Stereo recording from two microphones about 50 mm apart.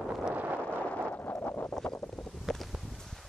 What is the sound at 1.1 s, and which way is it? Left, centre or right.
Wind noise, left.